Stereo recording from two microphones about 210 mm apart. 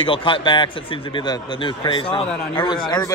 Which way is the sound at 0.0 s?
25° left (ahead or behind).